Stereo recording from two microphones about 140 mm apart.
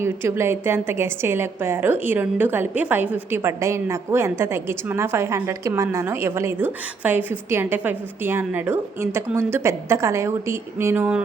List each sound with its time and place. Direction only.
0.0 s a woman's voice: 20° right (ahead or behind)